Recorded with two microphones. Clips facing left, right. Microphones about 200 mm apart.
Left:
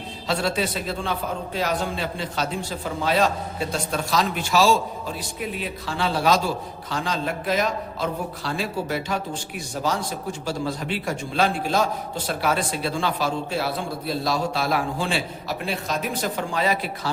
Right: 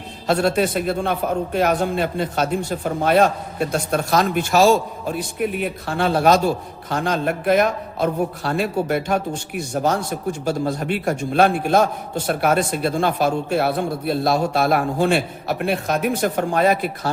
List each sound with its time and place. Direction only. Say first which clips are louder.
0.3 s a man's voice: right 6 dB; 55° right (ahead or behind)